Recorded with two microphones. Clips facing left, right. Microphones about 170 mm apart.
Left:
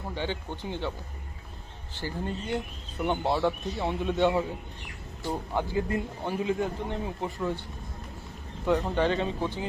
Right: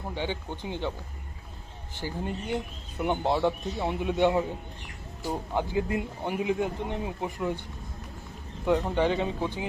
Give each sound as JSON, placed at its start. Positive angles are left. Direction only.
{"t": 0.1, "sound": "speech", "side_deg": -15}
{"t": 2.0, "sound": "speech", "side_deg": -15}
{"t": 9.0, "sound": "speech", "side_deg": -15}